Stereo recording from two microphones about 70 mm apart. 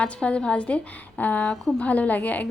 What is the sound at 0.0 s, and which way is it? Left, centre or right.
A woman's voice, centre.